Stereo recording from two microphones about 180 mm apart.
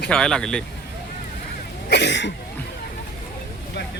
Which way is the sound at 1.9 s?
70° left (ahead or behind).